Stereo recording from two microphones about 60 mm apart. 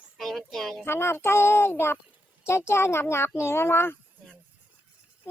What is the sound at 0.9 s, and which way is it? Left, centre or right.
A child's voice, left.